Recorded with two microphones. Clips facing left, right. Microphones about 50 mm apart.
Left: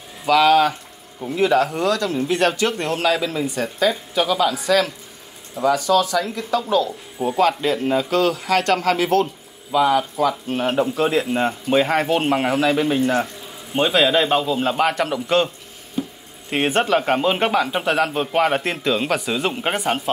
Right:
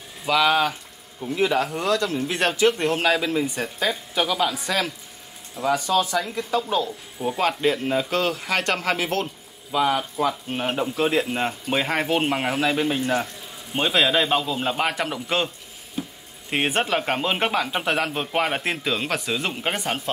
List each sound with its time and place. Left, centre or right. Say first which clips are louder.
0.3 s speech: left 5 dB; centre
4.6 s speech: left 7 dB; centre
7.7 s speech: left 4 dB; centre
8.1 s speech: left 5 dB; centre
16.0 s a sound: left 5 dB; centre
16.4 s speech: left 4 dB; centre